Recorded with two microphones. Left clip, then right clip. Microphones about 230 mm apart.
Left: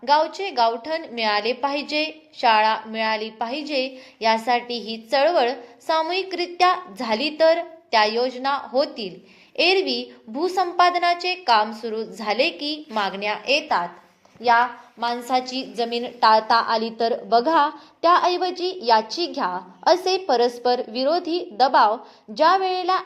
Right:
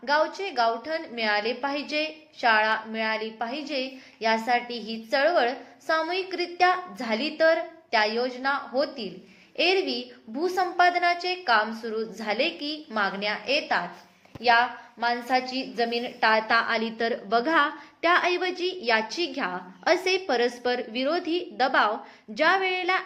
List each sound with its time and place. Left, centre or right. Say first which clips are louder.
0.0 s a woman's voice: left 5 dB; left
14.4 s a woman's voice: left 3 dB; centre
15.0 s a woman's voice: left 2 dB; left
17.0 s a woman's voice: left 7 dB; centre
17.4 s a woman's voice: left 4 dB; centre
20.2 s a woman's voice: left 6 dB; centre
21.2 s a woman's voice: left 5 dB; centre